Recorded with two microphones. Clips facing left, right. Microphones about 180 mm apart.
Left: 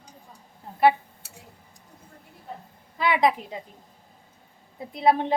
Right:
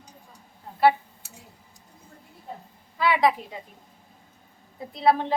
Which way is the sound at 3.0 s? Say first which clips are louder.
Even; 20° left (ahead or behind).